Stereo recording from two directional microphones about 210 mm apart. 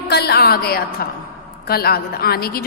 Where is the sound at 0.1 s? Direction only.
50° left (ahead or behind).